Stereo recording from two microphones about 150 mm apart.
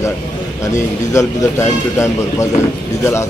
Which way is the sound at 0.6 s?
20° left (ahead or behind).